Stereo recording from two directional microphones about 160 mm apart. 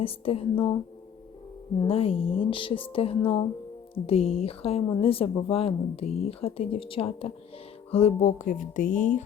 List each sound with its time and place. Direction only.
0.0 s speech: 35° left (ahead or behind)
1.8 s speech: 35° left (ahead or behind)
7.9 s music: 40° left (ahead or behind)